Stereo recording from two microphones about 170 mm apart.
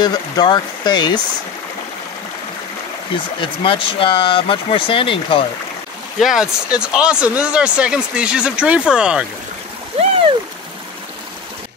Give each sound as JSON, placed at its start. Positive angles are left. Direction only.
{"t": 0.0, "sound": "speech", "side_deg": 25}
{"t": 3.3, "sound": "speech", "side_deg": 30}
{"t": 6.1, "sound": "speech", "side_deg": 0}